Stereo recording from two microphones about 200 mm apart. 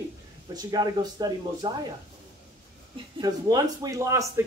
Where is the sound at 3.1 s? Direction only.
20° right (ahead or behind).